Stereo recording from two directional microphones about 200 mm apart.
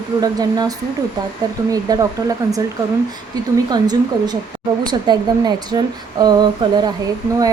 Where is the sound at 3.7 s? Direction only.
20° right (ahead or behind).